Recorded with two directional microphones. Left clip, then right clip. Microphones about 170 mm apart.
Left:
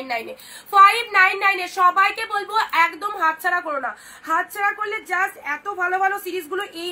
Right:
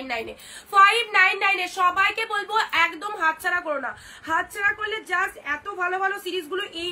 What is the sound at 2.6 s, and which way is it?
A woman's voice, 25° right (ahead or behind).